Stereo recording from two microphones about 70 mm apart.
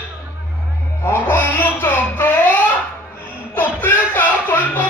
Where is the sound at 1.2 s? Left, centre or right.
Left.